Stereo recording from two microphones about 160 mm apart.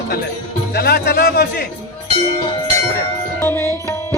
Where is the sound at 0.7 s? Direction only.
85° left.